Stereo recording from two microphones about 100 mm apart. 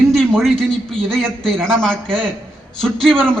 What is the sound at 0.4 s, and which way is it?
A man's voice, 5° left (ahead or behind).